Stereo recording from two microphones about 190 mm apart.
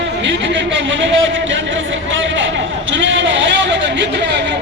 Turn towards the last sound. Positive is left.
turn(degrees=-70)  # may be behind; listen again after turning